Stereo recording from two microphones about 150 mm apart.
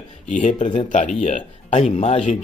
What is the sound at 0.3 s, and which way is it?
Speech, 55° left (ahead or behind).